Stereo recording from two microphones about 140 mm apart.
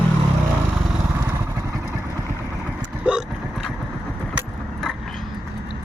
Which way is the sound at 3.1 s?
10° right (ahead or behind).